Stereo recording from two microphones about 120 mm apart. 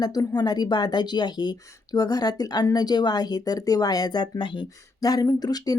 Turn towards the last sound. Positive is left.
turn(degrees=30)  # may be behind; listen again after turning